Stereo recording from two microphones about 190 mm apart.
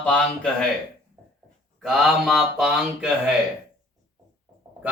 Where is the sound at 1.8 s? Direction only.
Centre (ahead or behind).